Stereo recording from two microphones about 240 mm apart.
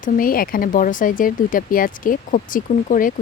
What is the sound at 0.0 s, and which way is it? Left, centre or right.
Speech, left.